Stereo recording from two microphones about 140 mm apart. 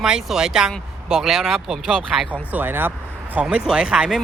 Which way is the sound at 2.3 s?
15° right (ahead or behind).